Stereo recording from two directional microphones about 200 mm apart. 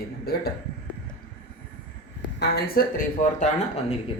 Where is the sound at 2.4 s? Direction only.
50° left (ahead or behind).